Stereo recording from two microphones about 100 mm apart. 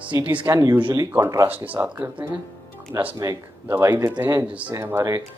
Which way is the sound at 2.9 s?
30° right (ahead or behind).